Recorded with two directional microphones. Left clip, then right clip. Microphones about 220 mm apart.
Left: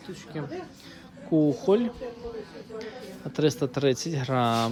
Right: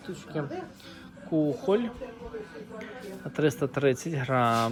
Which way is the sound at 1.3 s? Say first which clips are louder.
Left 3 dB; 25° left (ahead or behind).